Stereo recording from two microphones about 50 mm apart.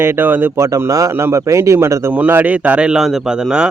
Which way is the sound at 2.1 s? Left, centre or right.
Right.